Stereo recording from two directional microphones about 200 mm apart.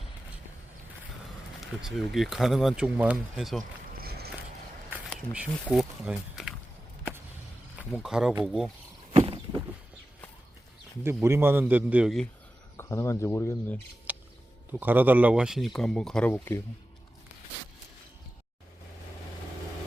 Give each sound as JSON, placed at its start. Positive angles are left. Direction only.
{"t": 1.6, "sound": "speech", "side_deg": 0}
{"t": 3.6, "sound": "a sound", "side_deg": -50}
{"t": 4.9, "sound": "speech", "side_deg": -5}
{"t": 7.9, "sound": "speech", "side_deg": 0}
{"t": 9.1, "sound": "a sound", "side_deg": -25}
{"t": 11.0, "sound": "a man's voice", "side_deg": -10}
{"t": 12.7, "sound": "speech", "side_deg": 15}
{"t": 14.1, "sound": "a sound", "side_deg": -5}
{"t": 14.7, "sound": "speech", "side_deg": -10}